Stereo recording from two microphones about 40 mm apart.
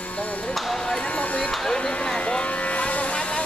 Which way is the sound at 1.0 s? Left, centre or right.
Left.